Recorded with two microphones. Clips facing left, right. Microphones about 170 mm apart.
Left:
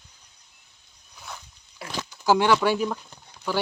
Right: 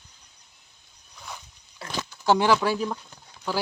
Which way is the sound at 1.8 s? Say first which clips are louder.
Even; 10° left (ahead or behind).